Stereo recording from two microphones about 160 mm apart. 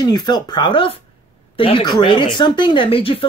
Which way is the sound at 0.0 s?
25° left (ahead or behind).